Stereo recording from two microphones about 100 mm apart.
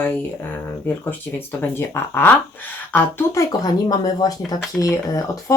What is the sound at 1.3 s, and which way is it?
Speech, 25° left (ahead or behind).